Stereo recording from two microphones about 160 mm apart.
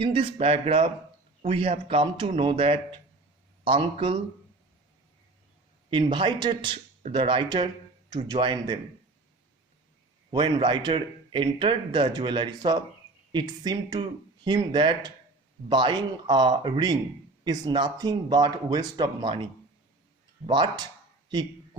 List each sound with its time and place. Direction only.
0.0 s speech: 35° right (ahead or behind)
5.9 s speech: 30° right (ahead or behind)
10.3 s speech: 30° right (ahead or behind)
20.5 s a sound: 25° right (ahead or behind)